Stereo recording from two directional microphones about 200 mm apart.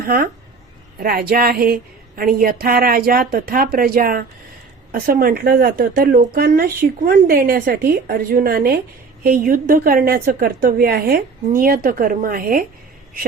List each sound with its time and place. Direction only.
0.0 s a woman's voice: 45° right (ahead or behind)